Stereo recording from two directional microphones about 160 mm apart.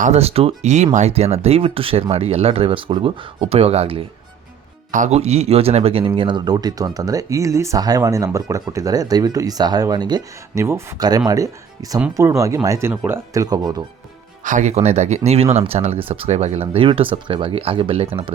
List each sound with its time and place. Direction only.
0.0 s speech: 40° right (ahead or behind)
4.9 s speech: 50° right (ahead or behind); by 12.9 s 20° right (ahead or behind)
12.9 s speech: 10° right (ahead or behind)
13.3 s speech: 25° right (ahead or behind)
14.4 s speech: 50° right (ahead or behind)